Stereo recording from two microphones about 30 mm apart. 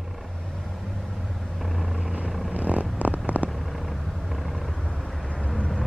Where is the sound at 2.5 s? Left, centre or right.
Right.